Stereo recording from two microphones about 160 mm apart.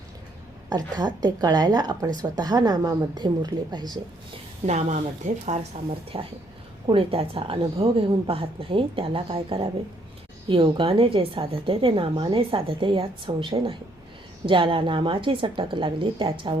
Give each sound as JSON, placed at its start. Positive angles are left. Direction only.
{"t": 0.7, "sound": "speech", "side_deg": -25}
{"t": 4.6, "sound": "a woman's voice", "side_deg": -50}
{"t": 6.1, "sound": "a woman's voice", "side_deg": -35}